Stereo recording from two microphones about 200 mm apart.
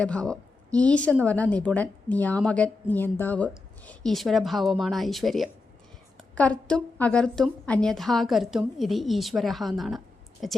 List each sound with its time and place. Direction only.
0.0 s a woman's voice: 5° left (ahead or behind)